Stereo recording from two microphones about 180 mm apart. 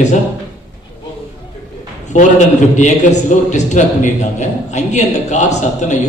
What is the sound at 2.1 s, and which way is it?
A man's voice, 45° left (ahead or behind).